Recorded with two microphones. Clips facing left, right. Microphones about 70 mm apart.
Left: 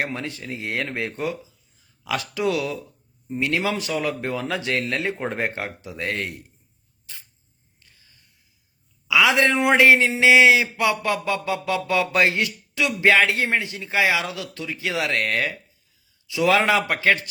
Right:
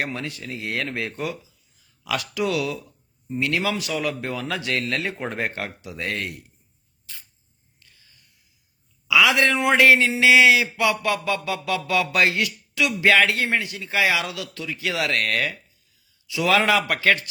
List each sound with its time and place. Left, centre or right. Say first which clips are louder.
0.0 s a man's voice: left 1 dB; left
7.1 s rodents: even; left
9.0 s a man's voice: even; left